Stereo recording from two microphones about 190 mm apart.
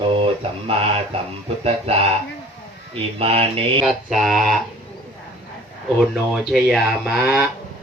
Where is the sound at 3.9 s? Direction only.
Centre (ahead or behind).